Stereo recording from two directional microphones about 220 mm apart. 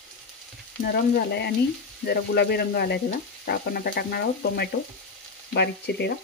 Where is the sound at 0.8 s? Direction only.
50° left (ahead or behind).